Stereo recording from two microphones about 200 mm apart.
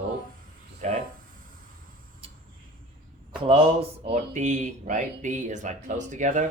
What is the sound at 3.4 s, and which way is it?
Speech, 30° right (ahead or behind).